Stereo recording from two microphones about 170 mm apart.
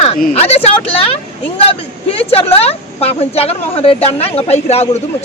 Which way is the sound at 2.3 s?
35° left (ahead or behind).